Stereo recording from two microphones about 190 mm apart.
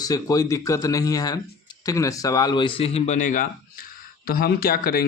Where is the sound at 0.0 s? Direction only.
20° left (ahead or behind).